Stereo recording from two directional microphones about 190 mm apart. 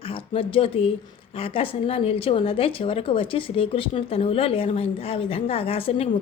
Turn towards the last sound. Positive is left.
turn(degrees=30)  # may be behind; listen again after turning